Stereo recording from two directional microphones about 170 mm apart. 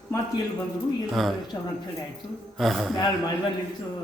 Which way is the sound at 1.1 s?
Centre (ahead or behind).